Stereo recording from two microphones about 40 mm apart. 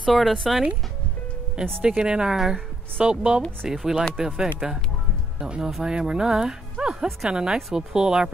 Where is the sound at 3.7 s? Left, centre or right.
Centre.